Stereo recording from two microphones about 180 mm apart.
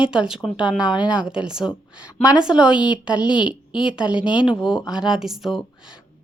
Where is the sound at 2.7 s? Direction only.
25° left (ahead or behind).